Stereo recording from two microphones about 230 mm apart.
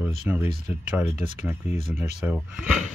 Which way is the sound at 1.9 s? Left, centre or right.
Centre.